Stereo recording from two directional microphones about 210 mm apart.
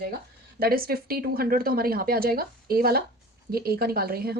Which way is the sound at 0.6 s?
45° right (ahead or behind).